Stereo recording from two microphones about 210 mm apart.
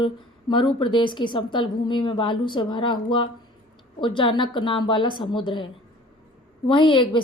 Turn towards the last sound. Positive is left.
turn(degrees=25)  # may be behind; listen again after turning